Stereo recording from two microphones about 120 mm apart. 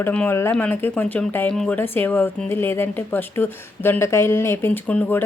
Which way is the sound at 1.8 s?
15° left (ahead or behind).